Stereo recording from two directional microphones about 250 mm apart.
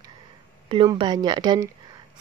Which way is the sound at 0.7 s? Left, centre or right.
Right.